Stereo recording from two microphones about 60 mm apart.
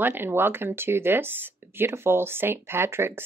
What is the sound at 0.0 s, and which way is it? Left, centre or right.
Speech, right.